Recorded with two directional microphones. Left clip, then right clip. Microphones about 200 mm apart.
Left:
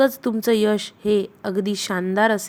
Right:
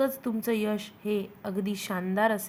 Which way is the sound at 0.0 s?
35° left (ahead or behind).